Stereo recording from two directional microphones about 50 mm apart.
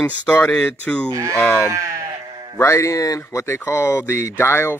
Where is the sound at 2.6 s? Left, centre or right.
Left.